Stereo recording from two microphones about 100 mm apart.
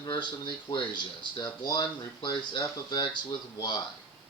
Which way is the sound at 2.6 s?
35° left (ahead or behind).